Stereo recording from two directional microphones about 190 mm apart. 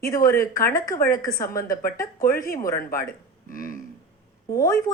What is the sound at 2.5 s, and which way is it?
Speech, 15° left (ahead or behind).